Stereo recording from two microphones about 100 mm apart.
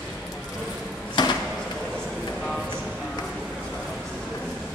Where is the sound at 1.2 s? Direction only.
50° left (ahead or behind).